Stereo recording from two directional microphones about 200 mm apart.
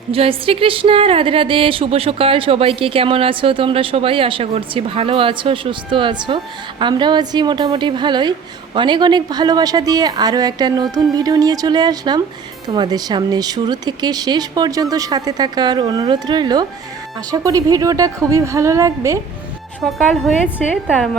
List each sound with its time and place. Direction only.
0.1 s a woman's voice: 30° right (ahead or behind)
19.8 s a woman's voice: centre (ahead or behind)